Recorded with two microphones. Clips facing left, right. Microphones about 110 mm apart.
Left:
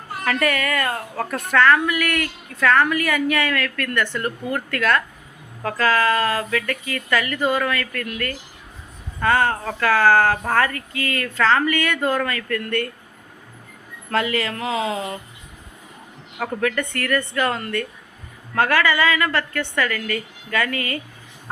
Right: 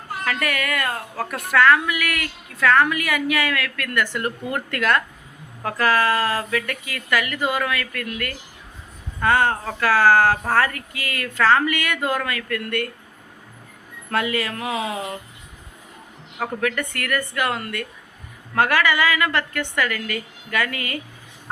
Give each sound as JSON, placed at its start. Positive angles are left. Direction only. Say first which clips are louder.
{"t": 0.3, "sound": "a woman's voice", "louder": "left 4 dB", "side_deg": -5}
{"t": 14.1, "sound": "a woman's voice", "louder": "left 1 dB", "side_deg": -10}
{"t": 16.4, "sound": "a woman's voice", "louder": "left 1 dB", "side_deg": -5}